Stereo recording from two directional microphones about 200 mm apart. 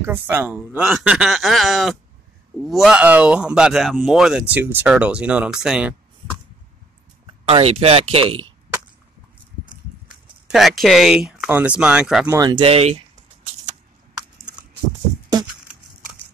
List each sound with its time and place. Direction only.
0.0 s speech: 10° right (ahead or behind)
7.4 s speech: 30° right (ahead or behind)
10.5 s speech: centre (ahead or behind)
12.4 s speech: 20° right (ahead or behind)